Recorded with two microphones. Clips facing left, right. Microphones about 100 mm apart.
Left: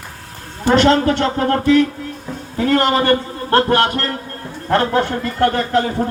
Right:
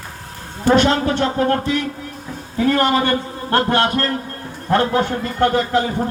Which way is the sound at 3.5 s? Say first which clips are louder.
Left 3 dB; 20° right (ahead or behind).